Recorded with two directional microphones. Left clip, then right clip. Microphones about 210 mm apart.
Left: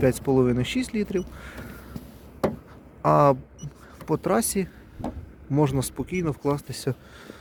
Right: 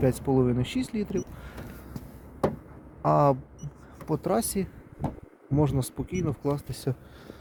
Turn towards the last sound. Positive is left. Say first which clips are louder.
# left 3 dB
turn(degrees=0)  # may be behind; listen again after turning